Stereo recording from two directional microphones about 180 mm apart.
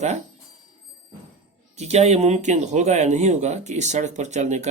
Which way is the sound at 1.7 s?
35° right (ahead or behind).